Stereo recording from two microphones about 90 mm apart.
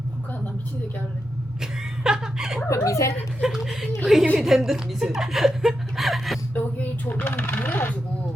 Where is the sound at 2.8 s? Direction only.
35° left (ahead or behind).